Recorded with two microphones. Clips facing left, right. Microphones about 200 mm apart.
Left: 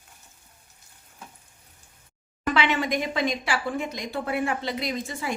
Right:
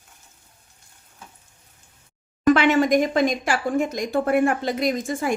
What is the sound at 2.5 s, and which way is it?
Speech, 45° right (ahead or behind).